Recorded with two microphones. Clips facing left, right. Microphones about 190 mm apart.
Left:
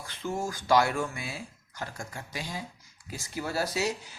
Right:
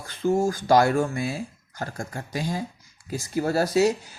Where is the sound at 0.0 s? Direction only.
45° right (ahead or behind).